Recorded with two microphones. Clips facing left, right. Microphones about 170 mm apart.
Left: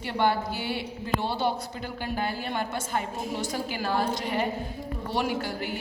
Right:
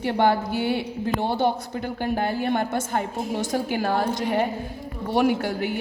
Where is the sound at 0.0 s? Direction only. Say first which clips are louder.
Right 5 dB; 50° right (ahead or behind).